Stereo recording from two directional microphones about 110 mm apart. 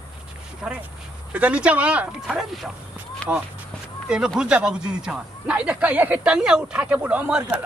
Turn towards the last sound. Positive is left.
turn(degrees=-10)  # may be behind; listen again after turning